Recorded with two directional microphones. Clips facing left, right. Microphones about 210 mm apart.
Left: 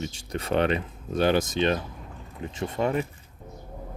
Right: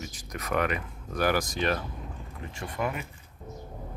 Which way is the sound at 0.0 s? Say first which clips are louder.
Left 6 dB; 30° left (ahead or behind).